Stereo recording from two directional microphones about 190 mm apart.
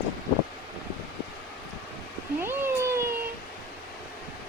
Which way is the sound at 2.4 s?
15° right (ahead or behind).